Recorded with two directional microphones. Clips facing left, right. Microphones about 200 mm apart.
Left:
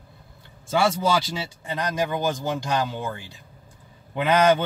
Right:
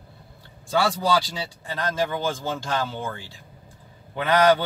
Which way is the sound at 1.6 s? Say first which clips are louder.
Even; 15° left (ahead or behind).